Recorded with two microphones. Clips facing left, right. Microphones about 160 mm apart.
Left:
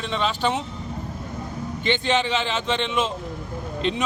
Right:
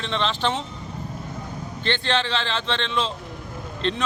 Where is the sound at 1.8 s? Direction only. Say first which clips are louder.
Left 2 dB; 15° left (ahead or behind).